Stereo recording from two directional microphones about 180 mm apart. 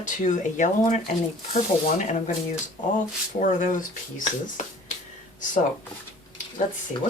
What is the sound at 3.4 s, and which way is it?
Speech, 45° left (ahead or behind).